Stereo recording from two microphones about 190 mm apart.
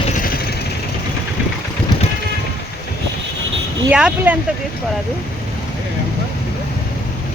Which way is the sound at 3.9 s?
5° right (ahead or behind).